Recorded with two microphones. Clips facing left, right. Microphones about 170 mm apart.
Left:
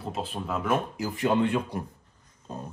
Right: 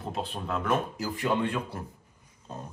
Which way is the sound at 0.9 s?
20° left (ahead or behind).